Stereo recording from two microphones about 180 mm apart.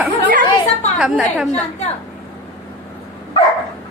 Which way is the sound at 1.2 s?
5° left (ahead or behind).